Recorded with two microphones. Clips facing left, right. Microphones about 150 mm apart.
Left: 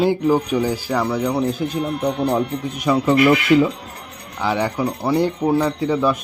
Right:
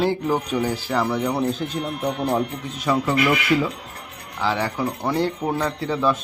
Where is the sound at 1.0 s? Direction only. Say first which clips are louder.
Left 1 dB; centre (ahead or behind).